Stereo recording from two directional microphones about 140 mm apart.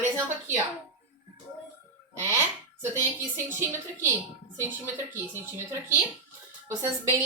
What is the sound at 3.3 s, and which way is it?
Speech, 15° right (ahead or behind).